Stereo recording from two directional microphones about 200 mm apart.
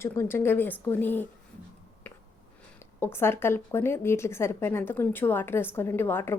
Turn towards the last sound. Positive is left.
turn(degrees=10)  # may be behind; listen again after turning